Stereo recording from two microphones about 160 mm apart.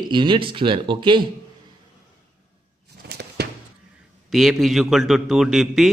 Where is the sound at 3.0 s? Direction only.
90° right.